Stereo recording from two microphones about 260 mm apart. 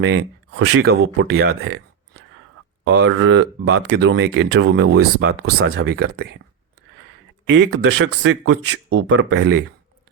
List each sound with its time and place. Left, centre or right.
0.0 s speech: right
1.5 s a sound: right
2.8 s speech: right
5.6 s speech: right
5.9 s speech: right
7.4 s speech: right
8.9 s speech: right